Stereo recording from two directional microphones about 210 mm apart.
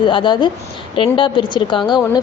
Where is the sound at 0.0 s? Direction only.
25° left (ahead or behind).